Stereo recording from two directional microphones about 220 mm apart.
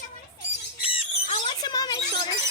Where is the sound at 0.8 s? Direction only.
25° left (ahead or behind).